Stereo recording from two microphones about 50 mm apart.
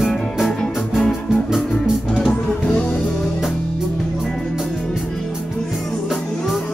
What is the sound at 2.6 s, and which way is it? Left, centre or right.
Music, centre.